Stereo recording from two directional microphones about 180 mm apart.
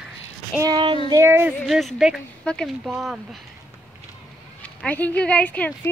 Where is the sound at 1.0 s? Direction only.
15° right (ahead or behind).